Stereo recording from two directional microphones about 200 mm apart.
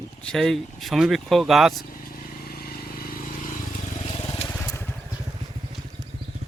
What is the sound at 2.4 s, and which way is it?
Vehicle, 50° left (ahead or behind).